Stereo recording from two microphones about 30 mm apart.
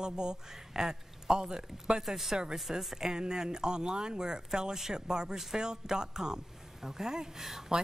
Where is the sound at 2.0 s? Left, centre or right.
Centre.